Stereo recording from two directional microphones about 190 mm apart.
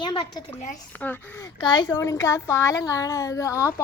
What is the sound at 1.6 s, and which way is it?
Speech, 25° left (ahead or behind).